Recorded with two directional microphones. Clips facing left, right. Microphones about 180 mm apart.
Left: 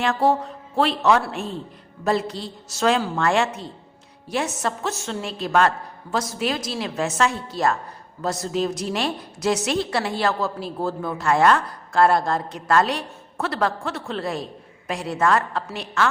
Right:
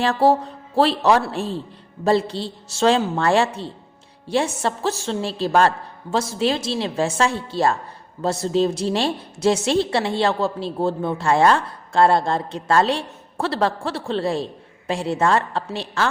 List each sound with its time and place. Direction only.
0.0 s a woman's voice: 35° right (ahead or behind)